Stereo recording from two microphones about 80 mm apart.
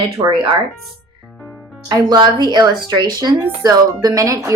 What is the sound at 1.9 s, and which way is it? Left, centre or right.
Speech, right.